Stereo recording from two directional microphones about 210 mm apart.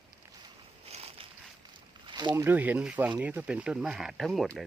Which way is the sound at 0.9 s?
30° right (ahead or behind).